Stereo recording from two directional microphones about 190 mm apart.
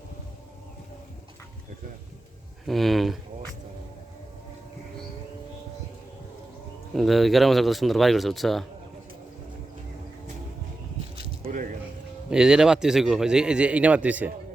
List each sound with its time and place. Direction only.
2.6 s speech: centre (ahead or behind)
6.9 s speech: centre (ahead or behind)
12.3 s speech: 5° right (ahead or behind)